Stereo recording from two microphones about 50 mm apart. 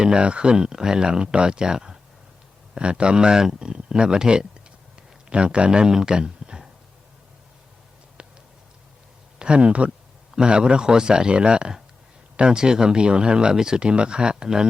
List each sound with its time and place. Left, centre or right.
0.0 s speech: centre
8.2 s a sound: right
9.4 s speech: right